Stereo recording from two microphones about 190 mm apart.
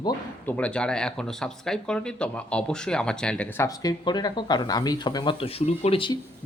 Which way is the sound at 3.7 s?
20° left (ahead or behind).